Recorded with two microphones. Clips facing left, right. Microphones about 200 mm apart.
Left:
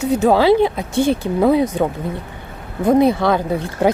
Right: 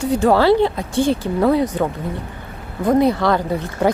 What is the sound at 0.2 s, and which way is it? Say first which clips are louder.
A woman's voice: left 1 dB; 15° left (ahead or behind).